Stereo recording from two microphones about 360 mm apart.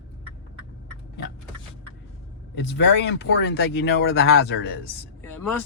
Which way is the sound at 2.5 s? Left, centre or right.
Left.